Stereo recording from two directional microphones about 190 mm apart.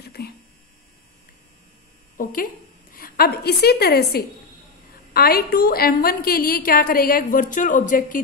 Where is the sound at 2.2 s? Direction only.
50° left (ahead or behind).